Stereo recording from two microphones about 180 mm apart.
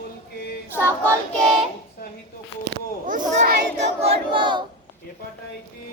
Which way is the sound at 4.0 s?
30° right (ahead or behind).